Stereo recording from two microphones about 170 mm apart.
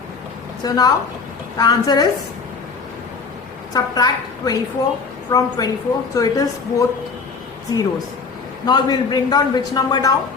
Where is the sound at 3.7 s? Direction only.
25° left (ahead or behind).